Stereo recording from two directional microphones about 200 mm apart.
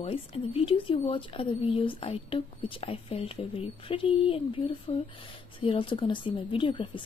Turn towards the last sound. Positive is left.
turn(degrees=25)  # may be behind; listen again after turning